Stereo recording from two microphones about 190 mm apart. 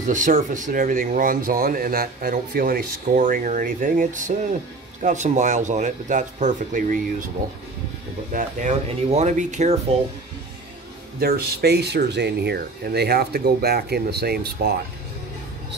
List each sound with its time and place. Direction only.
0.0 s speech: 45° right (ahead or behind)
8.3 s speech: 40° right (ahead or behind)
11.1 s speech: 55° right (ahead or behind)